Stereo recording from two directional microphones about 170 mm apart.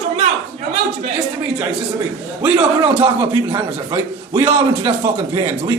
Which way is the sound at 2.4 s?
5° right (ahead or behind).